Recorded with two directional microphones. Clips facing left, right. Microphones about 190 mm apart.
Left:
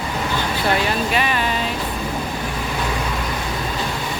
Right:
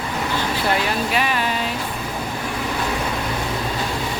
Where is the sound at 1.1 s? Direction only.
5° right (ahead or behind).